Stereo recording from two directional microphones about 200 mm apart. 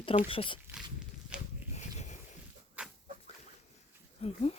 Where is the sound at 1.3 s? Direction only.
5° right (ahead or behind).